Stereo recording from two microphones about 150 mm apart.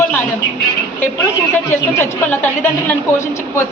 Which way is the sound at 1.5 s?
15° left (ahead or behind).